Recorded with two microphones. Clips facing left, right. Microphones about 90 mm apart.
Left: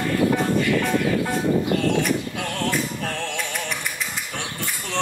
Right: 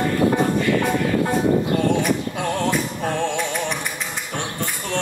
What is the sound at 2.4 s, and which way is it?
Music, 15° right (ahead or behind).